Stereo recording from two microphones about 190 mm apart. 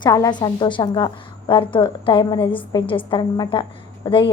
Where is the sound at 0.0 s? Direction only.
20° left (ahead or behind).